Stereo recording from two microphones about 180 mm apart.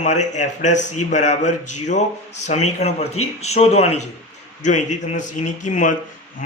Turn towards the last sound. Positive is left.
turn(degrees=45)  # may be behind; listen again after turning